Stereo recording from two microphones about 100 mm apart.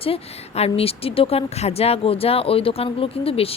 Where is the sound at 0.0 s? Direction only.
80° left.